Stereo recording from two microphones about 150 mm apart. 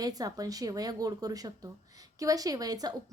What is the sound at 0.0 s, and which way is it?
A woman's voice, 25° right (ahead or behind).